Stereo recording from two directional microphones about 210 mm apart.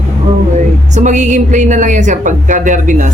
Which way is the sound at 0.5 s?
35° right (ahead or behind).